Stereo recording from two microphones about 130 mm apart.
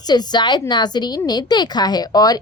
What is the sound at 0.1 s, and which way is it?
A woman's voice, 35° left (ahead or behind).